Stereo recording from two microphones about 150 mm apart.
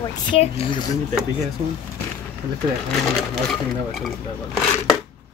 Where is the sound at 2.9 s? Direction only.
5° left (ahead or behind).